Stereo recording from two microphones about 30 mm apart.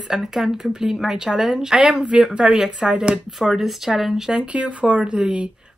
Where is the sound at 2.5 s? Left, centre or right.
Right.